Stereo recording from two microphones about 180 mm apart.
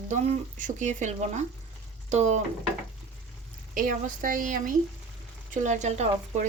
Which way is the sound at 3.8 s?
50° right (ahead or behind).